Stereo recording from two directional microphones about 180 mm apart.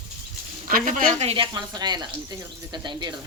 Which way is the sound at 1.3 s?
25° right (ahead or behind).